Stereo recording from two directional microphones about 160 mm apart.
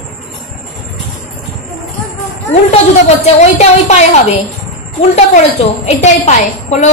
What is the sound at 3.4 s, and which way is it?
Speech, 45° left (ahead or behind).